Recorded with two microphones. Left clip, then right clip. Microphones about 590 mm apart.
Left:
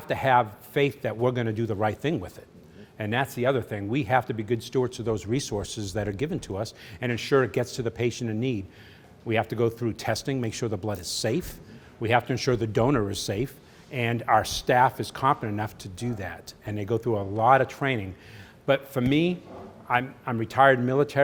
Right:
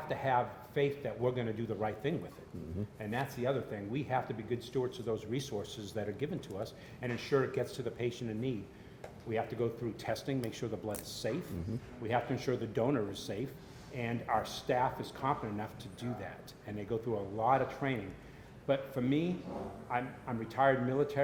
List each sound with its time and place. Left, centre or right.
0.1 s speech: left
3.0 s speech: left